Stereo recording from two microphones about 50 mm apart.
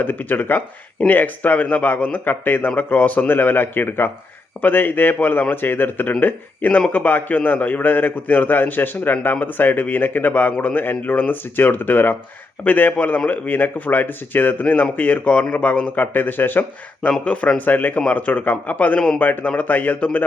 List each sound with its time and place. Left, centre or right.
0.0 s a man's voice: left
3.2 s a man's voice: left
17.2 s a man's voice: left